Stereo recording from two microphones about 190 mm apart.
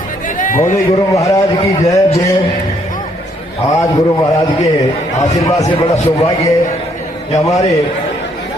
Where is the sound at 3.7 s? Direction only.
20° left (ahead or behind).